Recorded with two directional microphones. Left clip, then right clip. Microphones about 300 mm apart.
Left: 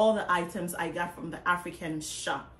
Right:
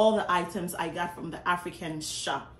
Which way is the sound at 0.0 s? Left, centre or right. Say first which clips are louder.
Right 1 dB; centre.